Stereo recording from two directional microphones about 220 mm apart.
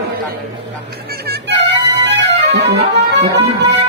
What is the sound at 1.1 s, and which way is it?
Music, 45° right (ahead or behind).